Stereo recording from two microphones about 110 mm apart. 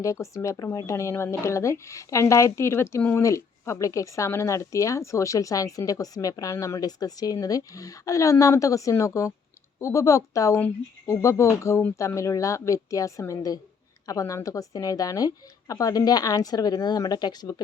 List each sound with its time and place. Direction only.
0.0 s speech: 30° left (ahead or behind)